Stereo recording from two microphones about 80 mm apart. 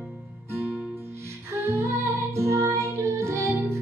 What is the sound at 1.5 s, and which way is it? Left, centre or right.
Music, right.